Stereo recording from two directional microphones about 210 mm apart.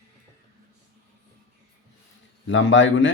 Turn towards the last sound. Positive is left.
turn(degrees=60)  # may be behind; listen again after turning